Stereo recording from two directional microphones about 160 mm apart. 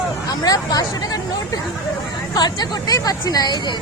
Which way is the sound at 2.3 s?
25° left (ahead or behind).